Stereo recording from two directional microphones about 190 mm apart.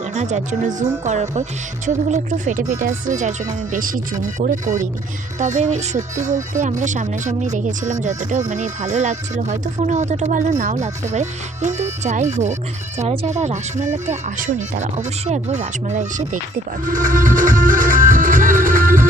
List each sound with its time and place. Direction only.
0.0 s speech: 35° right (ahead or behind)
16.8 s music: 45° right (ahead or behind)